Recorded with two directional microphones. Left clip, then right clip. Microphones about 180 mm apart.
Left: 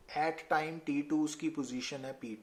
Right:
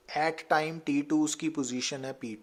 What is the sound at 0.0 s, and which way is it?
Speech, 40° right (ahead or behind).